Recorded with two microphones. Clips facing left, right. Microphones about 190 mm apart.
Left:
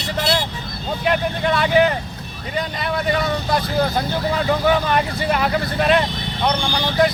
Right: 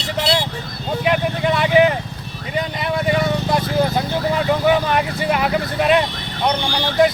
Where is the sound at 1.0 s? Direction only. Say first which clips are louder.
Right 1 dB; 10° right (ahead or behind).